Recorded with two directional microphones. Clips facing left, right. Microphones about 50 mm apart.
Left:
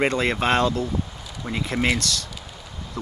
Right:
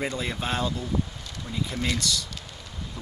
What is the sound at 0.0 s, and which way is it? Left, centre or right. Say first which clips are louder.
Speech: left 8 dB; left.